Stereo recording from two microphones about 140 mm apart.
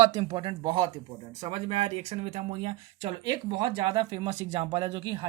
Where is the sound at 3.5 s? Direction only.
30° right (ahead or behind).